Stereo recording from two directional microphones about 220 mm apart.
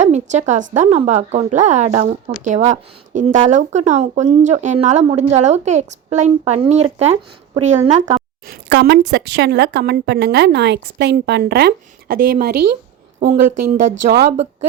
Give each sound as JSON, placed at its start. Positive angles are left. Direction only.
{"t": 0.0, "sound": "a sound", "side_deg": -30}
{"t": 0.7, "sound": "a woman's voice", "side_deg": -30}
{"t": 8.4, "sound": "a woman's voice", "side_deg": -45}
{"t": 13.1, "sound": "speech", "side_deg": -30}
{"t": 14.0, "sound": "a woman's voice", "side_deg": -45}